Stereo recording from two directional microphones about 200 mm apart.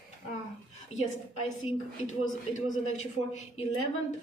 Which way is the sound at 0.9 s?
35° left (ahead or behind).